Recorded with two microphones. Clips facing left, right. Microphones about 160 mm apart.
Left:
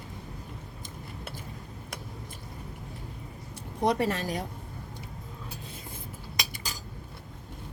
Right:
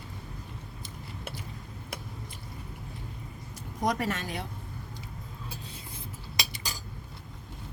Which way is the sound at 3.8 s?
30° left (ahead or behind).